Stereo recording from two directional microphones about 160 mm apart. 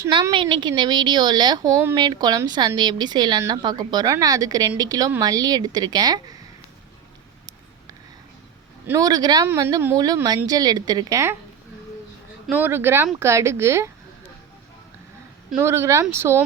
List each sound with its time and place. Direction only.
0.1 s a woman's voice: 30° right (ahead or behind)
8.9 s a woman's voice: 25° right (ahead or behind)
12.5 s speech: 10° right (ahead or behind)
15.5 s speech: 15° right (ahead or behind)